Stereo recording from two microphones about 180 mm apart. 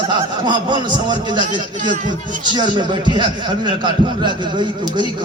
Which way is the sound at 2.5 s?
25° right (ahead or behind).